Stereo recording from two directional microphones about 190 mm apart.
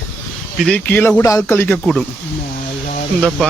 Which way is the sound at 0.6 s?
10° left (ahead or behind).